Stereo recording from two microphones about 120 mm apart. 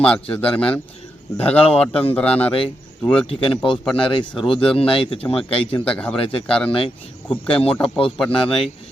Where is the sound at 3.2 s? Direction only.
45° left (ahead or behind).